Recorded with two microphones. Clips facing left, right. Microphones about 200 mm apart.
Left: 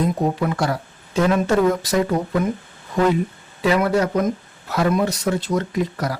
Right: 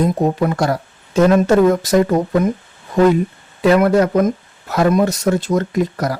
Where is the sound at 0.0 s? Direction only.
45° right (ahead or behind).